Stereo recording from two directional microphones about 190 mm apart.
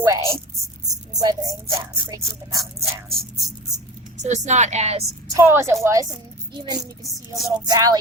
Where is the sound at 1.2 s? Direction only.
20° right (ahead or behind).